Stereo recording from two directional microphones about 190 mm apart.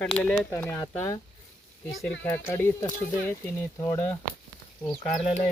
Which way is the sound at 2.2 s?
15° left (ahead or behind).